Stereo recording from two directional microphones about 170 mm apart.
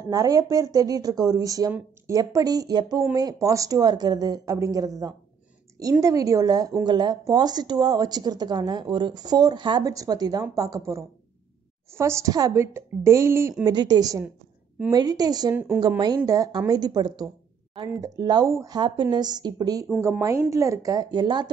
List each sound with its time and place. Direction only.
0.0 s a woman's voice: 20° right (ahead or behind)
15.5 s a woman's voice: 10° right (ahead or behind)